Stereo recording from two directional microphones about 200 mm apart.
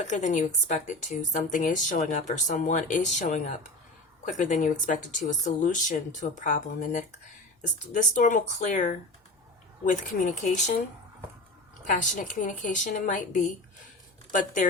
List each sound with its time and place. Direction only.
0.0 s a woman's voice: 35° left (ahead or behind)
11.9 s a woman's voice: 40° left (ahead or behind)